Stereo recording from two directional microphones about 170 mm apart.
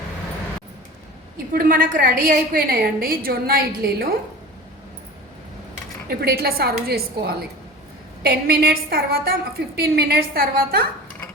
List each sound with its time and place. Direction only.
1.5 s a woman's voice: 55° right (ahead or behind)
6.1 s a woman's voice: 65° right (ahead or behind)
8.2 s a woman's voice: 65° right (ahead or behind)